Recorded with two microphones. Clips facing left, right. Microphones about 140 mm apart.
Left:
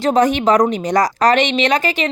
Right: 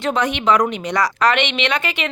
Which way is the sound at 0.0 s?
40° left (ahead or behind).